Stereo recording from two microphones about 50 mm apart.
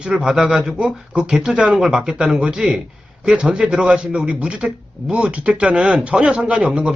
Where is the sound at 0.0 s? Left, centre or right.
Centre.